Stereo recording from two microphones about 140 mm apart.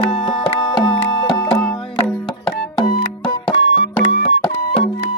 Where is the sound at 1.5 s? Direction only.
10° left (ahead or behind).